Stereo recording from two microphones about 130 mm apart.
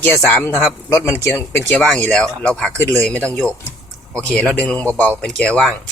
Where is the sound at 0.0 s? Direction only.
10° left (ahead or behind).